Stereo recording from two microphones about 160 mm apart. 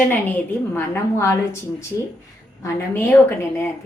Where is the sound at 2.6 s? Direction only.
15° left (ahead or behind).